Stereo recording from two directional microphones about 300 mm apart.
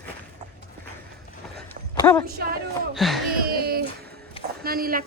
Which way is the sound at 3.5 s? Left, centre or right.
Right.